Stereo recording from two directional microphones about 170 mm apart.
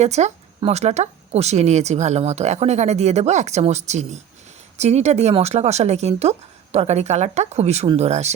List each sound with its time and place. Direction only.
0.0 s speech: 40° right (ahead or behind)